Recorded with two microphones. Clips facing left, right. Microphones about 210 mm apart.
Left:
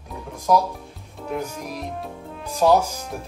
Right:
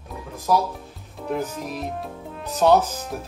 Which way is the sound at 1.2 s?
Centre (ahead or behind).